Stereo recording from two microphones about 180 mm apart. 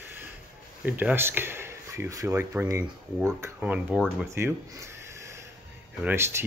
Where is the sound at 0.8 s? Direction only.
10° right (ahead or behind).